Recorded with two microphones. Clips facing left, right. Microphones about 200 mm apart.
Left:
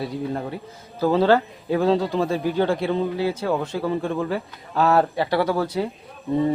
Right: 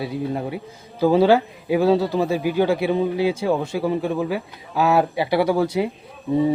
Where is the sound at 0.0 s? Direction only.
5° right (ahead or behind).